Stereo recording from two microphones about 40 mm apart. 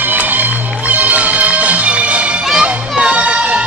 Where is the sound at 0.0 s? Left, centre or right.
Right.